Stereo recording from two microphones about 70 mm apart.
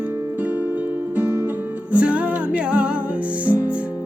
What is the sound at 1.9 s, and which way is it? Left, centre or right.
Music, centre.